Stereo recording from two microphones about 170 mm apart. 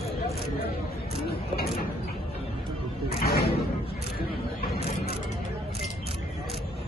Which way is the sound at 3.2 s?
65° left (ahead or behind).